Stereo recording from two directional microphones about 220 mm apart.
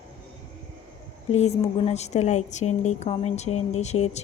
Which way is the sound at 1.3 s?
30° left (ahead or behind).